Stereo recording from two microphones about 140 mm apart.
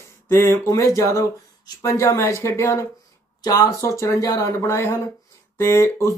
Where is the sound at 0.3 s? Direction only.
20° left (ahead or behind).